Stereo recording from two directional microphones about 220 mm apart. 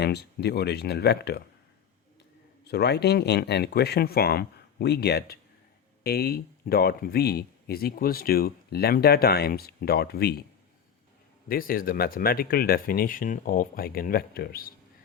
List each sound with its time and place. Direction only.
0.0 s speech: 45° left (ahead or behind)
2.6 s speech: 50° left (ahead or behind)
11.4 s speech: 40° left (ahead or behind)